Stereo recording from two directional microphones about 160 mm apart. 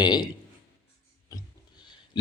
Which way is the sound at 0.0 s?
25° left (ahead or behind).